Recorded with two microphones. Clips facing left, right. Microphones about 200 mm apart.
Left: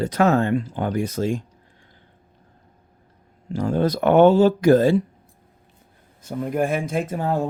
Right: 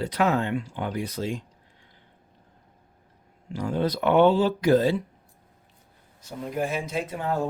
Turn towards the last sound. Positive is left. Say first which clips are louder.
# left 5 dB
turn(degrees=45)  # may be behind; listen again after turning